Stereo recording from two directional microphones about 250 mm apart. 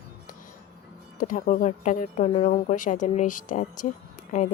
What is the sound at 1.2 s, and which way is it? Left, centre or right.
Speech, left.